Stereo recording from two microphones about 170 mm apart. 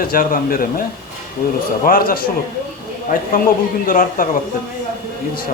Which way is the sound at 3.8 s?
55° left (ahead or behind).